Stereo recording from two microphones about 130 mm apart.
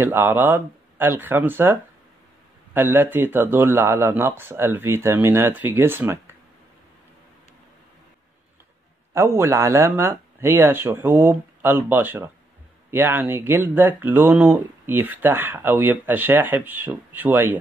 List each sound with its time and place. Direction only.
0.0 s speech: 15° right (ahead or behind)
9.1 s speech: 20° right (ahead or behind)